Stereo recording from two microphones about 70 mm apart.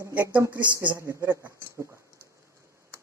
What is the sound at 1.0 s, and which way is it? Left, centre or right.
Speech, right.